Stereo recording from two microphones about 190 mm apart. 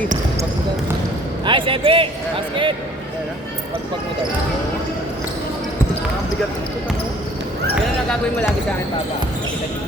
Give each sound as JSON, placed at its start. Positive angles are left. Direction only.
{"t": 1.5, "sound": "speech", "side_deg": -25}